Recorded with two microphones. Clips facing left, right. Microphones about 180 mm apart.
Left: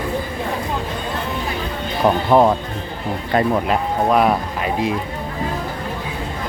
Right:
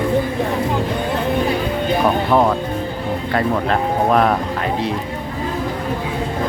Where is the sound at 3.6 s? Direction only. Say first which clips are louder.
Right 1 dB; 5° left (ahead or behind).